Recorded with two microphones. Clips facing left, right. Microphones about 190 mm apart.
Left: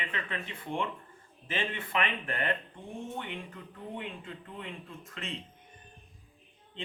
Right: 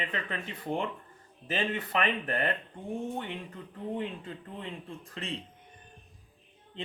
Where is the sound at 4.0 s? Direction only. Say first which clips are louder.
Right 5 dB; 35° right (ahead or behind).